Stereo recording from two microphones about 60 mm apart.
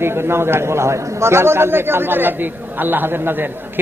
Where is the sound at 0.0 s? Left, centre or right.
Right.